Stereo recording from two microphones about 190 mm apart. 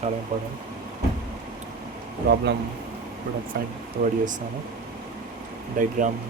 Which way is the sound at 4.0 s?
50° right (ahead or behind).